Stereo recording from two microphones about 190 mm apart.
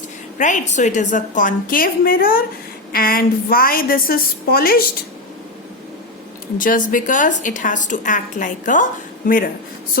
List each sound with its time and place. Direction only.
0.3 s a woman's voice: 40° left (ahead or behind)
6.6 s a woman's voice: 45° left (ahead or behind)